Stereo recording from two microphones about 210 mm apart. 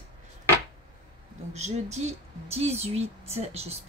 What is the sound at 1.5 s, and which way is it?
Speech, 30° right (ahead or behind).